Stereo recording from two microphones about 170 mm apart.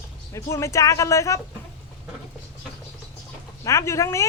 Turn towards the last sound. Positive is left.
turn(degrees=15)  # may be behind; listen again after turning